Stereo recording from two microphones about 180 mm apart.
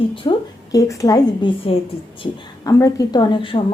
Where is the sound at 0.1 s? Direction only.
25° left (ahead or behind).